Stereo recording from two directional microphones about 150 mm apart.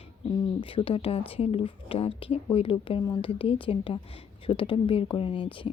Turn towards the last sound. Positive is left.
turn(degrees=35)  # may be behind; listen again after turning